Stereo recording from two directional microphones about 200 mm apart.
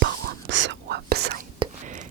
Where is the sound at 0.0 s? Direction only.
65° right (ahead or behind).